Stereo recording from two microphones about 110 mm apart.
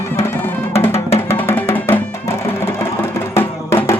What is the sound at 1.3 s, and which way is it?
Music, 20° left (ahead or behind).